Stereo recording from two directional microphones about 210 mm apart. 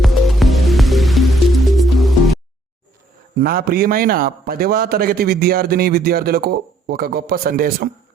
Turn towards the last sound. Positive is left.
turn(degrees=-45)  # may be behind; listen again after turning